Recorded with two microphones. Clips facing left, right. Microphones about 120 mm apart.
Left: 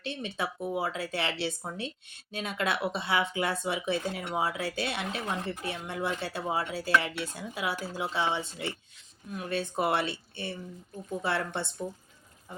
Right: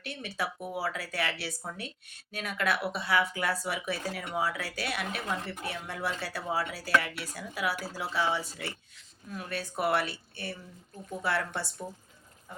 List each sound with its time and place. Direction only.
0.0 s speech: 25° left (ahead or behind)